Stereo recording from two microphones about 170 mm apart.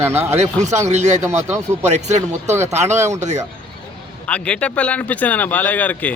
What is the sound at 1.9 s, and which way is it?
Speech, 40° right (ahead or behind).